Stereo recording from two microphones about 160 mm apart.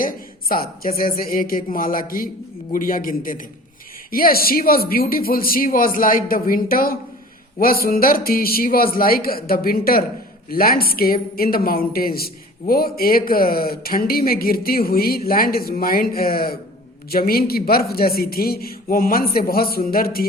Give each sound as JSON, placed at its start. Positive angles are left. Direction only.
{"t": 0.0, "sound": "a woman's voice", "side_deg": 65}